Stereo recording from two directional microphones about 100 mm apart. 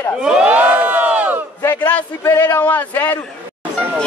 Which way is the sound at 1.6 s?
20° left (ahead or behind).